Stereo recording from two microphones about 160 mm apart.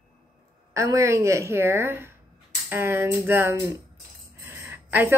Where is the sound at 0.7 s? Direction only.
20° right (ahead or behind).